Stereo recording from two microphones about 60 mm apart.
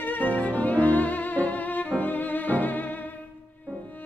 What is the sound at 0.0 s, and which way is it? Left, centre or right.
Music, left.